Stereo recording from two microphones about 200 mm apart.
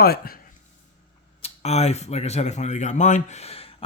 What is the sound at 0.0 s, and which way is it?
Speech, 50° left (ahead or behind).